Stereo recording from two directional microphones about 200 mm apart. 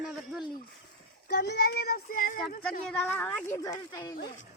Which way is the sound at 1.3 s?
50° left (ahead or behind).